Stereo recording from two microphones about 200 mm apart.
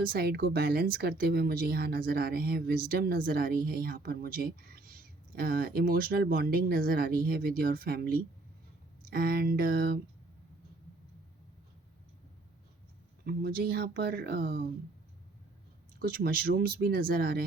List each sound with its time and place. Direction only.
0.0 s speech: 50° right (ahead or behind)
13.2 s speech: 50° right (ahead or behind)
16.0 s speech: 50° right (ahead or behind)